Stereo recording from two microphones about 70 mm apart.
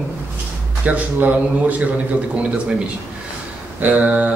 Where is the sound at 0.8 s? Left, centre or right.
Right.